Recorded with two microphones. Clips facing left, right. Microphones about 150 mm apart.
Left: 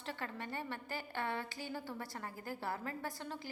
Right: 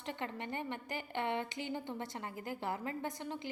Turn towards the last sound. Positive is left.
turn(degrees=-20)  # may be behind; listen again after turning